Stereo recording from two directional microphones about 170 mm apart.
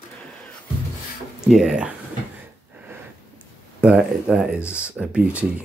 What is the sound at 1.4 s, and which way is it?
Speech, 5° right (ahead or behind).